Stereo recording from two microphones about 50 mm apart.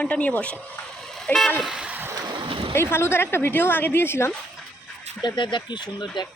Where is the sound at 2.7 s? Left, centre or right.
Left.